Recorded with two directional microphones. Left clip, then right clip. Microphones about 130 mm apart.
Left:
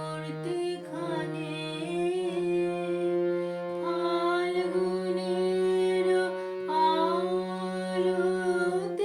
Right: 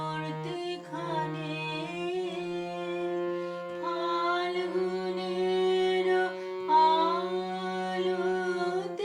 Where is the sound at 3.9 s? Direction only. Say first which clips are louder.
Left 1 dB; 45° left (ahead or behind).